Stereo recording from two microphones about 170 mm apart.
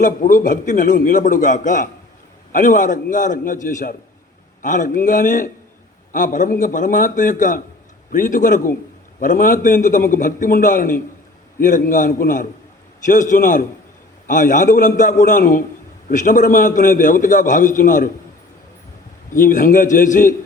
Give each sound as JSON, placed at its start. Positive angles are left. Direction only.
{"t": 0.0, "sound": "a man's voice", "side_deg": 50}
{"t": 19.3, "sound": "a man's voice", "side_deg": 50}